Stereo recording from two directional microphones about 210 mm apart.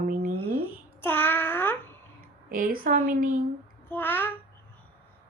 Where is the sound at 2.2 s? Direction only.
40° right (ahead or behind).